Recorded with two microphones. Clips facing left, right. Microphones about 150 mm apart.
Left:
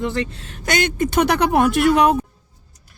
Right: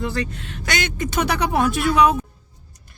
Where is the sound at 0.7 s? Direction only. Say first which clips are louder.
Left 5 dB; 50° left (ahead or behind).